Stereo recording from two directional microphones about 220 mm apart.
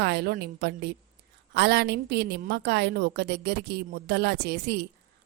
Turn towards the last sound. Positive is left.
turn(degrees=-50)  # may be behind; listen again after turning